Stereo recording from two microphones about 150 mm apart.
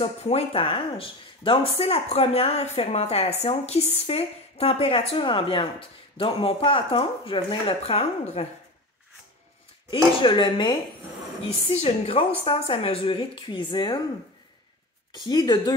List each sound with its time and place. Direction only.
0.0 s speech: 45° left (ahead or behind)
10.2 s speech: 30° left (ahead or behind)
11.7 s a woman's voice: 45° left (ahead or behind)
15.1 s speech: 30° left (ahead or behind)